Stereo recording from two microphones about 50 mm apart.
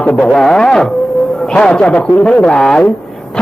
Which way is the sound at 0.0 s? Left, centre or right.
Left.